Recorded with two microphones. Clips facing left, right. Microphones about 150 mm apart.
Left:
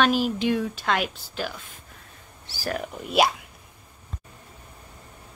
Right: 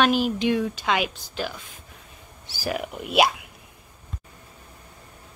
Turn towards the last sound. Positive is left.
turn(degrees=-5)  # may be behind; listen again after turning